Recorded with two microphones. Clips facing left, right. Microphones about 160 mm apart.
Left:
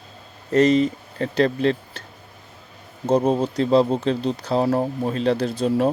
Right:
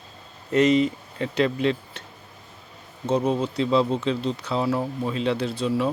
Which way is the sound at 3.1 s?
40° left (ahead or behind).